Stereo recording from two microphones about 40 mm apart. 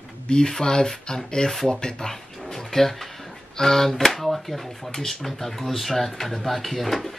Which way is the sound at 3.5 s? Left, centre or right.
Centre.